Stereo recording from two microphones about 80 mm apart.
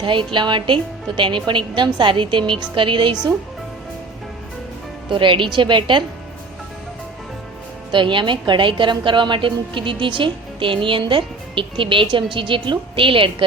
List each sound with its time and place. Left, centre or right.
0.0 s a woman's voice: right
5.0 s a woman's voice: right
7.9 s a woman's voice: right